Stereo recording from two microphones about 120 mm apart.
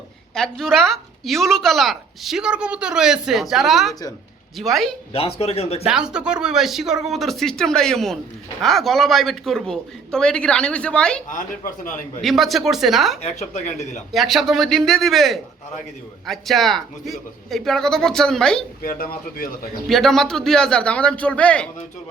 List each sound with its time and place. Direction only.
0.3 s a woman's voice: 5° left (ahead or behind)
5.1 s speech: 55° left (ahead or behind)
5.8 s a woman's voice: 5° right (ahead or behind)
11.3 s a man's voice: 90° left
12.2 s a woman's voice: centre (ahead or behind)
13.2 s speech: 75° left (ahead or behind)
14.1 s a woman's voice: centre (ahead or behind)
19.9 s a man's voice: centre (ahead or behind)